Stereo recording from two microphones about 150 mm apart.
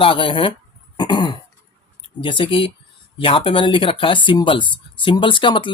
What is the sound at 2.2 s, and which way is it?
Speech, 35° left (ahead or behind).